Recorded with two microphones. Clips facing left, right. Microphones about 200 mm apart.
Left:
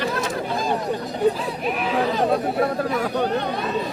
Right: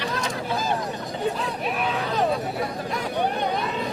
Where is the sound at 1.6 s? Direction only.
Centre (ahead or behind).